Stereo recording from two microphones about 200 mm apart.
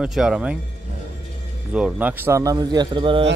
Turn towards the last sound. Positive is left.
turn(degrees=-25)  # may be behind; listen again after turning